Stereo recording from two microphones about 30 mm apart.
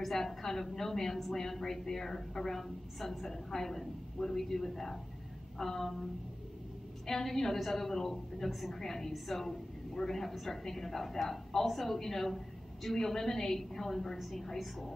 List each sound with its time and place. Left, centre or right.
0.0 s a woman's voice: centre
7.3 s a woman's voice: centre
8.7 s a woman's voice: centre